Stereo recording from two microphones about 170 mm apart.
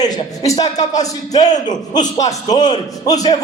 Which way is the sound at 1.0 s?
20° left (ahead or behind).